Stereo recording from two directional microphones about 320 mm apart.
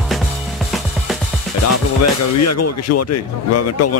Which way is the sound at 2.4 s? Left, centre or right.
Left.